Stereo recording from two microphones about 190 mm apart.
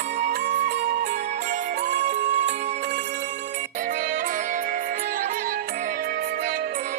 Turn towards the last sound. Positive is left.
turn(degrees=-45)  # may be behind; listen again after turning